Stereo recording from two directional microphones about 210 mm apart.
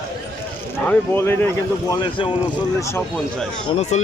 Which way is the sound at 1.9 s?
25° left (ahead or behind).